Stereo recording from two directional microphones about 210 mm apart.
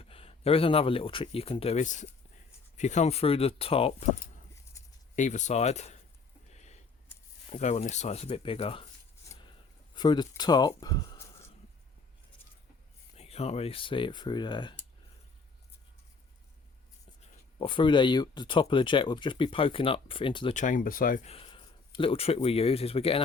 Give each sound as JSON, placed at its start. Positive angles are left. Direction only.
{"t": 0.0, "sound": "speech", "side_deg": 25}
{"t": 5.1, "sound": "speech", "side_deg": 35}
{"t": 6.5, "sound": "a sound", "side_deg": 30}
{"t": 7.5, "sound": "speech", "side_deg": 30}
{"t": 9.2, "sound": "a sound", "side_deg": 20}
{"t": 13.1, "sound": "speech", "side_deg": 30}
{"t": 17.6, "sound": "speech", "side_deg": 25}
{"t": 20.5, "sound": "speech", "side_deg": 35}
{"t": 21.2, "sound": "speech", "side_deg": 25}